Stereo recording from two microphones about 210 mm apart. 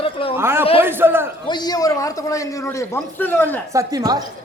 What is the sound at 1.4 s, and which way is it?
A man's voice, 20° left (ahead or behind).